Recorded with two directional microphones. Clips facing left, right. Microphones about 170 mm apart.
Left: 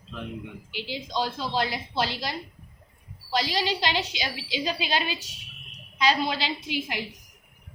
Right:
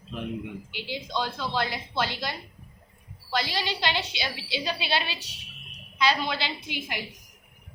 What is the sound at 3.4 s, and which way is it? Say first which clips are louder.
A woman's voice: left 3 dB; 40° left (ahead or behind).